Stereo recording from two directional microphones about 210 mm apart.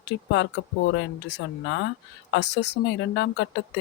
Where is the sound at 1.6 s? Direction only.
60° left (ahead or behind).